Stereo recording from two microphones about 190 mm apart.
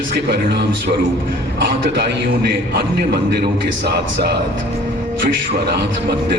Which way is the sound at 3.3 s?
60° right (ahead or behind).